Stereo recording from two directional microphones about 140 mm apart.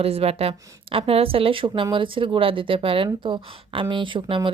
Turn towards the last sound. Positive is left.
turn(degrees=-35)  # may be behind; listen again after turning